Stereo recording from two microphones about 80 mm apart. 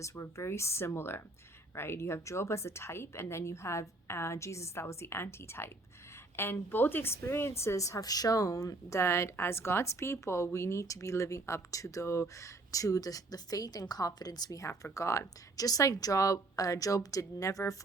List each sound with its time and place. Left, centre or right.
0.0 s a woman's voice: left